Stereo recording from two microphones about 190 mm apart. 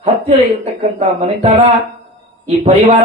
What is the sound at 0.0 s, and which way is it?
Speech, 35° right (ahead or behind).